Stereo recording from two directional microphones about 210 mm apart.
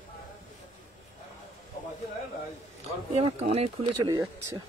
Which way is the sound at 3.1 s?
30° right (ahead or behind).